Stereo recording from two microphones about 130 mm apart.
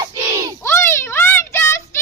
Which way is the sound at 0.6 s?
20° left (ahead or behind).